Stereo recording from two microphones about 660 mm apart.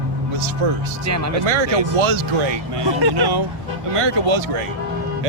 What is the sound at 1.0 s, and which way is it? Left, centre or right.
Speech, right.